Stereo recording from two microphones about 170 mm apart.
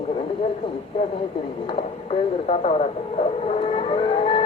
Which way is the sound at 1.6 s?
35° left (ahead or behind).